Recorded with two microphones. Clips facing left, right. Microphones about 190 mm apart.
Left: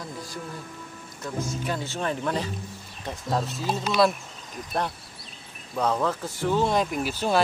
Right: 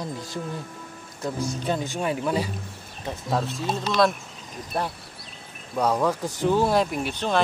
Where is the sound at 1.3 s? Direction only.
35° right (ahead or behind).